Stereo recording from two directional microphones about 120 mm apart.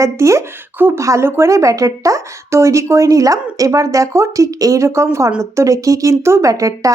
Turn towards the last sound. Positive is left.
turn(degrees=-25)  # may be behind; listen again after turning